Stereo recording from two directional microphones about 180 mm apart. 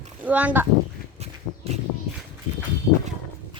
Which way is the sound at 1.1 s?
35° right (ahead or behind).